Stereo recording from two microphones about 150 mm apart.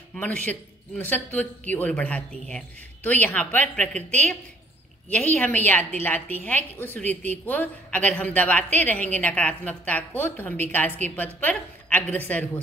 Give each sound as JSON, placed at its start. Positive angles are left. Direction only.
{"t": 0.1, "sound": "speech", "side_deg": 10}